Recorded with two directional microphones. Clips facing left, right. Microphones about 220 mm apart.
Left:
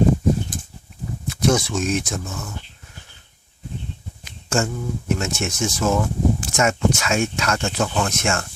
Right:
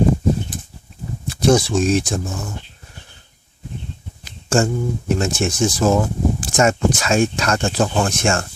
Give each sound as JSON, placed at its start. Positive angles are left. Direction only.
{"t": 1.3, "sound": "speech", "side_deg": -30}
{"t": 4.2, "sound": "speech", "side_deg": -35}